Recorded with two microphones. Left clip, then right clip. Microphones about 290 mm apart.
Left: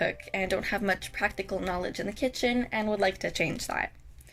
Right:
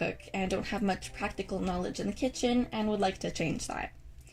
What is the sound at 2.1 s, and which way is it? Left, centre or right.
A woman's voice, left.